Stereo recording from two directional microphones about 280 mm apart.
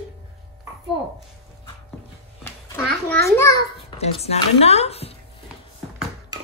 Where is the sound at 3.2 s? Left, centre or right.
Centre.